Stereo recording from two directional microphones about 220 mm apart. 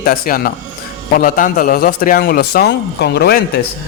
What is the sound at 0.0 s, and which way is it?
Speech, 40° left (ahead or behind).